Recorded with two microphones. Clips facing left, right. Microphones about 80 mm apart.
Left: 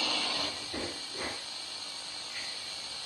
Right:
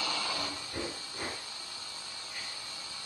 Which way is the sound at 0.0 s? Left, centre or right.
Right.